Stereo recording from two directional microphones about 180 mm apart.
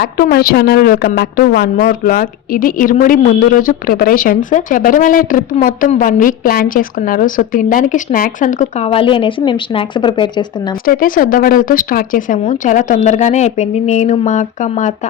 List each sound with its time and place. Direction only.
0.0 s a woman's voice: 55° left (ahead or behind); by 10.8 s 25° left (ahead or behind)
10.8 s a woman's voice: 50° left (ahead or behind)